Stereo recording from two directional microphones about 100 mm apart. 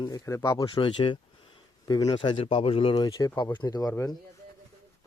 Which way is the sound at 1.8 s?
40° left (ahead or behind).